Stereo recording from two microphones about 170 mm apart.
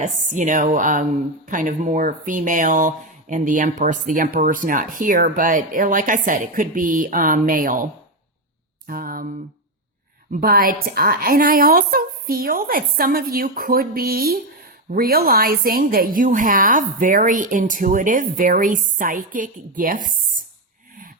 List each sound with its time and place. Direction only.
0.0 s speech: 50° right (ahead or behind)
8.9 s a sound: 55° right (ahead or behind)
10.3 s a woman's voice: 55° right (ahead or behind)